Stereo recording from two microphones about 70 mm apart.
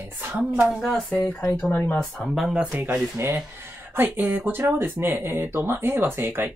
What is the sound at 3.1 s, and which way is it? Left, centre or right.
Speech, right.